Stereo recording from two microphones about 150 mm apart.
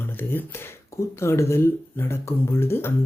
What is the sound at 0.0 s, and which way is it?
Speech, 15° left (ahead or behind).